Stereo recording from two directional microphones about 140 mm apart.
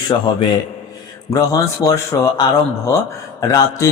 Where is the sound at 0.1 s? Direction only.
30° left (ahead or behind).